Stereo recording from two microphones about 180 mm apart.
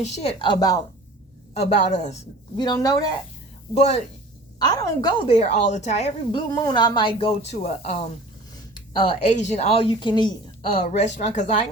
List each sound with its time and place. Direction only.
0.0 s a woman's voice: 35° left (ahead or behind)
1.5 s a woman's voice: 40° left (ahead or behind)
2.6 s a woman's voice: 20° left (ahead or behind)
3.8 s a woman's voice: 40° left (ahead or behind)
4.6 s a woman's voice: 20° left (ahead or behind)
5.3 s a woman's voice: 40° left (ahead or behind)
6.5 s a woman's voice: 20° left (ahead or behind); by 8.0 s 40° left (ahead or behind)
8.7 s a woman's voice: 25° left (ahead or behind)